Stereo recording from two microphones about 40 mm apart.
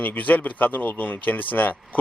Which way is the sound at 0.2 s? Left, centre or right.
Left.